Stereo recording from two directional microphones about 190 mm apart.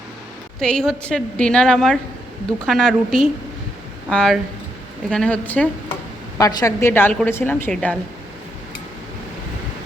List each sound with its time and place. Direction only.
0.6 s a woman's voice: 5° left (ahead or behind)